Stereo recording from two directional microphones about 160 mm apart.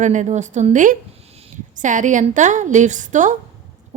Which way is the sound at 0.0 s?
50° right (ahead or behind).